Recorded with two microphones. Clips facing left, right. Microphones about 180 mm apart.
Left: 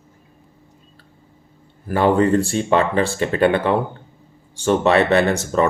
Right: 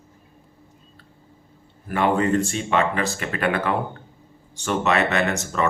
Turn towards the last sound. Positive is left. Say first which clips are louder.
# left 7 dB
turn(degrees=35)  # may be behind; listen again after turning